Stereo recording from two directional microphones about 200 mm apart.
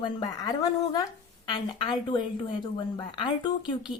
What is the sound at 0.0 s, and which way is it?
A woman's voice, 20° left (ahead or behind).